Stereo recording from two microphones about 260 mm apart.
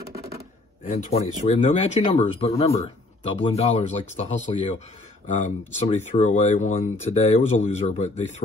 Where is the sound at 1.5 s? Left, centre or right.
Left.